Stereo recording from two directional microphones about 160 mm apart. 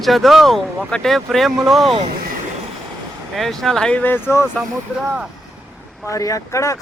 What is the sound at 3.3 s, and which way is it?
Speech, centre (ahead or behind).